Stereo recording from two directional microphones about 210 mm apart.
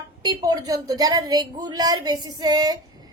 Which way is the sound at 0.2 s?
20° right (ahead or behind).